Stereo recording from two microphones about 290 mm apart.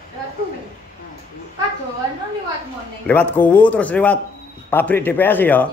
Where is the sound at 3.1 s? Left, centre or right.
Centre.